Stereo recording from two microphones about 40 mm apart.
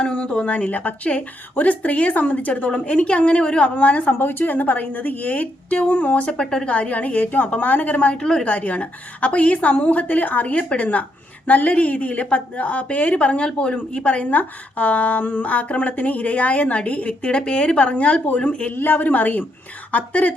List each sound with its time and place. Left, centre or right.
0.0 s speech: left
4.2 s a woman's voice: left
6.3 s a woman's voice: left
6.7 s a woman's voice: left
8.1 s a woman's voice: centre
8.4 s speech: left
17.2 s a woman's voice: left
18.7 s a woman's voice: left